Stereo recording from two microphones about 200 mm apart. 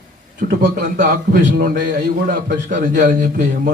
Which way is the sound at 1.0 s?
45° right (ahead or behind).